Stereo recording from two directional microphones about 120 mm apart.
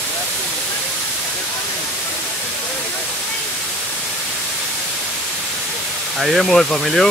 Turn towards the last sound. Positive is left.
turn(degrees=0)  # may be behind; listen again after turning